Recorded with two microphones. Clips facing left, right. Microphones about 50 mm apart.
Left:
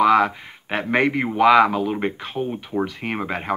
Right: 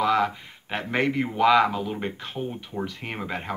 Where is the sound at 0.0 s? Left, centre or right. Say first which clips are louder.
Left 6 dB; left.